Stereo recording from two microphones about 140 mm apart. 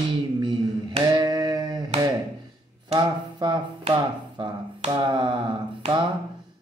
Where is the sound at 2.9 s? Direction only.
30° right (ahead or behind).